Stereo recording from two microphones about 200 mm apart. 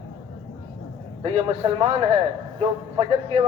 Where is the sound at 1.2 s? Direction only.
30° right (ahead or behind).